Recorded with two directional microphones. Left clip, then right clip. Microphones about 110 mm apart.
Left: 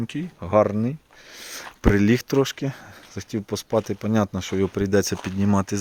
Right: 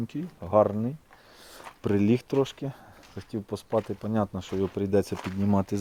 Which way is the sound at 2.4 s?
35° left (ahead or behind).